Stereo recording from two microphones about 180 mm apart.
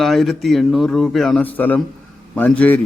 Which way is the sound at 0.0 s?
Centre (ahead or behind).